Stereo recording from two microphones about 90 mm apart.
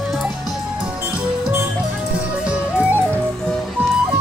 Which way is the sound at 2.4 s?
15° right (ahead or behind).